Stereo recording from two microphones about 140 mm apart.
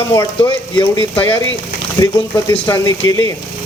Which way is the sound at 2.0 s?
25° left (ahead or behind).